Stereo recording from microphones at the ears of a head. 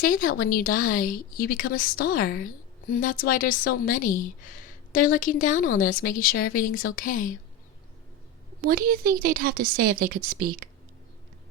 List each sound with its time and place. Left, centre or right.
0.0 s a woman's voice: left
8.6 s speech: right